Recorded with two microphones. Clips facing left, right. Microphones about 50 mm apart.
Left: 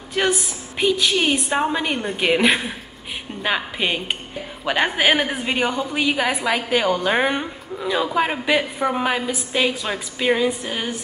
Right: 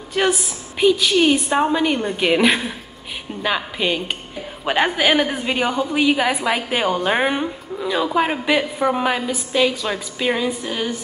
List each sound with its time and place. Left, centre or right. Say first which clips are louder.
0.1 s a woman's voice: right 2 dB; centre
4.6 s a woman's voice: right 2 dB; centre
4.9 s a woman's voice: right 1 dB; centre
9.5 s a woman's voice: right 3 dB; centre
9.8 s a woman's voice: left 1 dB; centre